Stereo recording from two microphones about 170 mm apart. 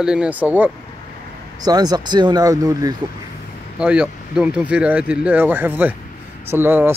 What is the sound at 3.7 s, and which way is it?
Speech, 5° right (ahead or behind).